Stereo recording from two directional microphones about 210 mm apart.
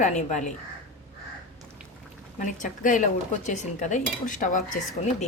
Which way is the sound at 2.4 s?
35° left (ahead or behind).